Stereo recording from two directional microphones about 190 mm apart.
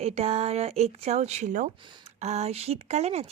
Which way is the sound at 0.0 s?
35° right (ahead or behind).